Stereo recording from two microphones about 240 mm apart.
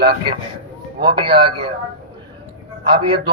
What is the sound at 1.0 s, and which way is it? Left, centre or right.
Speech, centre.